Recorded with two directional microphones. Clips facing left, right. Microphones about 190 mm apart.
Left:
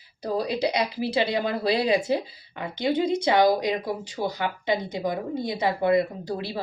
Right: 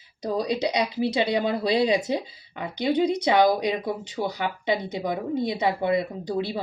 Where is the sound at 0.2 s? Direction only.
20° right (ahead or behind).